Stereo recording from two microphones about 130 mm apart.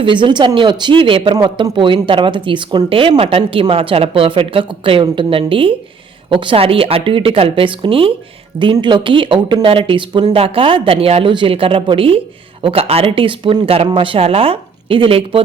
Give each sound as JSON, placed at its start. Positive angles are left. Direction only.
{"t": 0.0, "sound": "speech", "side_deg": -35}